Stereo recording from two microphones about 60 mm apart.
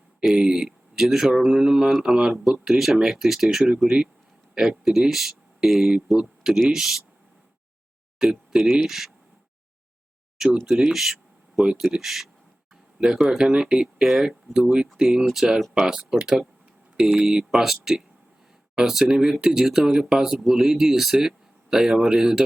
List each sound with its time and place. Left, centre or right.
0.3 s speech: centre
8.2 s speech: centre
10.3 s a sound: centre
10.7 s speech: centre
11.5 s speech: centre
16.0 s speech: centre
16.2 s speech: centre